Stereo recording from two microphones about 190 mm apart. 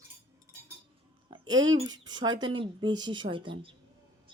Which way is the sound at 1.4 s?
90° right.